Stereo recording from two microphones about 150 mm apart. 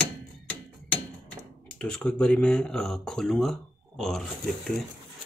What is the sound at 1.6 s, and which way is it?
Speech, 5° left (ahead or behind).